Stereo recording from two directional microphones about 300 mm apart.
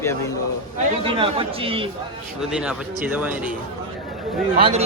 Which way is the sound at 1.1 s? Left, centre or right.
Centre.